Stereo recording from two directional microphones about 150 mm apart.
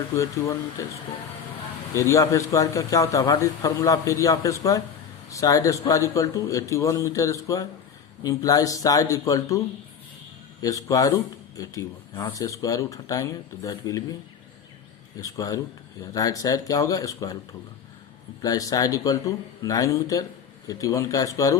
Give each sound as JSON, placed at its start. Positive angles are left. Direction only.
{"t": 0.2, "sound": "speech", "side_deg": 20}
{"t": 1.9, "sound": "speech", "side_deg": 20}
{"t": 10.6, "sound": "speech", "side_deg": 25}
{"t": 15.2, "sound": "speech", "side_deg": 25}
{"t": 18.4, "sound": "speech", "side_deg": 25}